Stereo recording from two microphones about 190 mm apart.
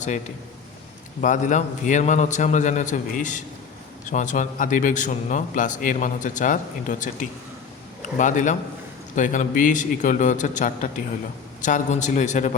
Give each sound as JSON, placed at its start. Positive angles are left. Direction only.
{"t": 1.2, "sound": "a man's voice", "side_deg": 40}